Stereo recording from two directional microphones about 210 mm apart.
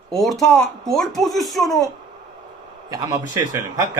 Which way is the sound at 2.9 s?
15° right (ahead or behind).